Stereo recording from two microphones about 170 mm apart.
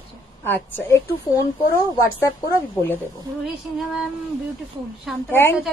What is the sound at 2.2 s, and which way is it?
Speech, 10° left (ahead or behind).